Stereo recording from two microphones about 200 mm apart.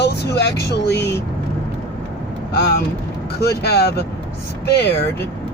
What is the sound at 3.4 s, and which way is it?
Speech, 55° left (ahead or behind).